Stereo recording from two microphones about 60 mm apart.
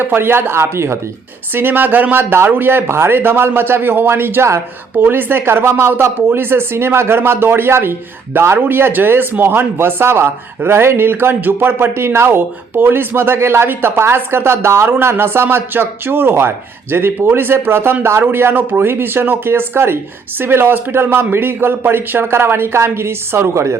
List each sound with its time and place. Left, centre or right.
0.0 s speech: right
1.5 s speech: right
4.9 s speech: right